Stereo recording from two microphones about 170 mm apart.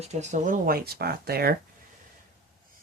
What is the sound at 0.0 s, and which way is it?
Speech, 40° right (ahead or behind).